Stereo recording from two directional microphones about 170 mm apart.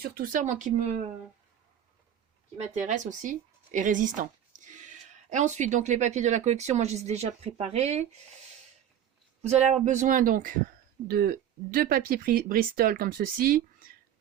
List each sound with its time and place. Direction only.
0.0 s speech: 60° right (ahead or behind)
2.6 s speech: 45° right (ahead or behind)
9.4 s speech: 40° right (ahead or behind); by 13.6 s 60° right (ahead or behind)